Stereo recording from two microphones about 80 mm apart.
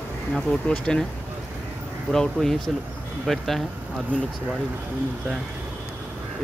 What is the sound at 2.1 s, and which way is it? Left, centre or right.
Speech, centre.